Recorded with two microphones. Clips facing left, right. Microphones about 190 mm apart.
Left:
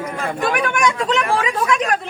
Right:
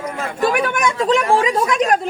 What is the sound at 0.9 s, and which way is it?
Speech, 30° right (ahead or behind).